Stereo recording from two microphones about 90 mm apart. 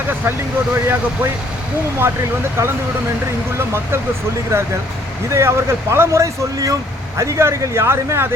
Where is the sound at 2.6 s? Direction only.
30° right (ahead or behind).